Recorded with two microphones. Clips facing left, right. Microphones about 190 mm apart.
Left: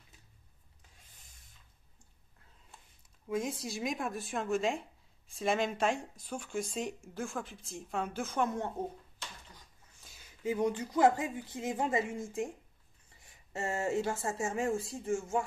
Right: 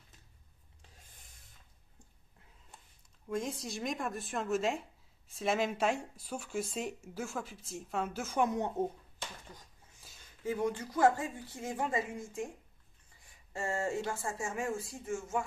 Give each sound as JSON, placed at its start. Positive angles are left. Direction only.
{"t": 3.3, "sound": "speech", "side_deg": 0}
{"t": 10.4, "sound": "a woman's voice", "side_deg": 15}
{"t": 13.5, "sound": "speech", "side_deg": 20}